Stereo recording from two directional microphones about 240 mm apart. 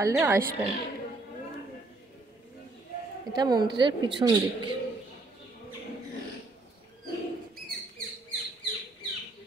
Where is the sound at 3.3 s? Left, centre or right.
Centre.